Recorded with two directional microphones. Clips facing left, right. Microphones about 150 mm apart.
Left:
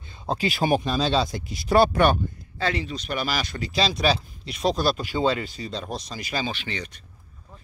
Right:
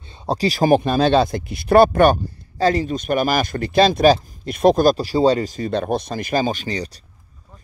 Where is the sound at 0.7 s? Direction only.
60° right (ahead or behind).